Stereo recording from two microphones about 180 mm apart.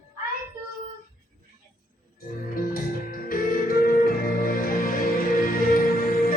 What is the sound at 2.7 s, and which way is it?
Music, 50° left (ahead or behind).